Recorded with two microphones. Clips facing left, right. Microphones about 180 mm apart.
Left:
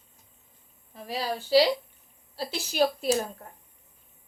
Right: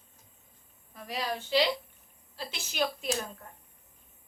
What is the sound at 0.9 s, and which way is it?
A woman's voice, 30° left (ahead or behind).